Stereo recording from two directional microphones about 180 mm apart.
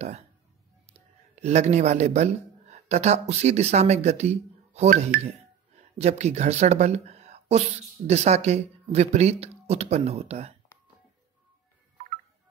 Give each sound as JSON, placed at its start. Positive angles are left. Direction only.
{"t": 1.3, "sound": "a woman's voice", "side_deg": -40}